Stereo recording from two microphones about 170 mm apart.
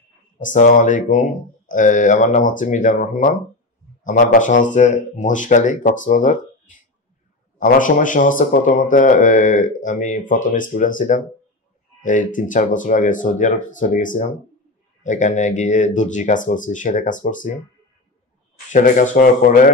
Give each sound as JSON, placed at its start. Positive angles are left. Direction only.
{"t": 0.4, "sound": "speech", "side_deg": 50}
{"t": 7.5, "sound": "speech", "side_deg": 50}
{"t": 18.7, "sound": "speech", "side_deg": 50}